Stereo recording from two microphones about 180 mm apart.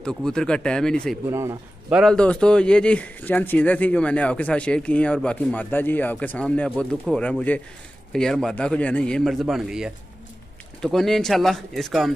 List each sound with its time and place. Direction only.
0.0 s a man's voice: 5° left (ahead or behind)
1.3 s a man's voice: 15° right (ahead or behind)
2.0 s a man's voice: 5° left (ahead or behind)